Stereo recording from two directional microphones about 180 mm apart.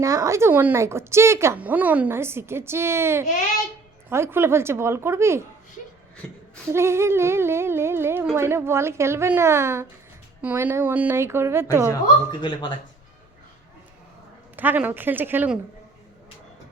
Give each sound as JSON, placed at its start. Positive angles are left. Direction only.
{"t": 0.0, "sound": "a woman's voice", "side_deg": -15}
{"t": 6.2, "sound": "speech", "side_deg": 5}
{"t": 6.7, "sound": "a woman's voice", "side_deg": -15}
{"t": 12.3, "sound": "speech", "side_deg": 25}
{"t": 14.5, "sound": "a woman's voice", "side_deg": -10}